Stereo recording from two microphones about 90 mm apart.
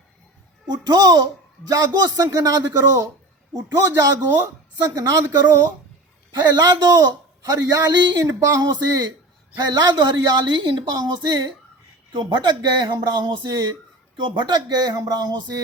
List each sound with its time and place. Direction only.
0.7 s a man's voice: 45° right (ahead or behind)
6.6 s a man's voice: 45° right (ahead or behind)
12.1 s a man's voice: 60° right (ahead or behind)